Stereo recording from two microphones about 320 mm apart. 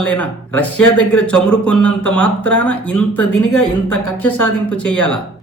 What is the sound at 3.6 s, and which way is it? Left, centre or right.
Speech, left.